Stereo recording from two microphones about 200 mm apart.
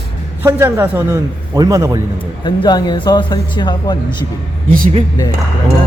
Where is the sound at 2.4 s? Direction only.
20° left (ahead or behind).